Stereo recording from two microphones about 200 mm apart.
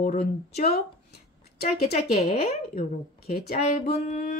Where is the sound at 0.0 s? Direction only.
40° left (ahead or behind).